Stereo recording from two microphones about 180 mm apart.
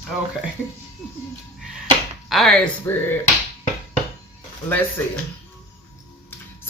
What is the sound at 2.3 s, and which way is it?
Speech, centre (ahead or behind).